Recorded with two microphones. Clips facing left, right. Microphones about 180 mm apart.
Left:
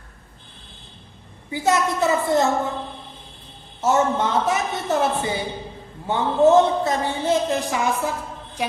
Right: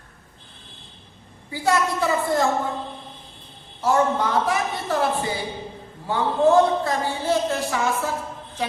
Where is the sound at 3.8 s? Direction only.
20° left (ahead or behind).